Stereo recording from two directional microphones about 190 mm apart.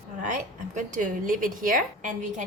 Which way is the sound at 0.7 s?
40° right (ahead or behind).